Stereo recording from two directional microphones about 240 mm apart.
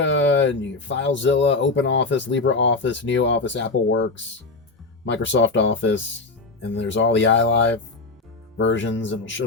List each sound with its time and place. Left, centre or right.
0.0 s speech: left